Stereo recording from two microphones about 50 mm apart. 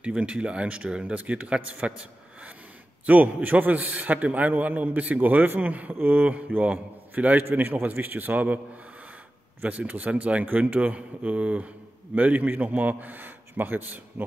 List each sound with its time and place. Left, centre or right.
0.0 s a man's voice: right
3.1 s a man's voice: right
6.2 s a man's voice: right
9.6 s a man's voice: right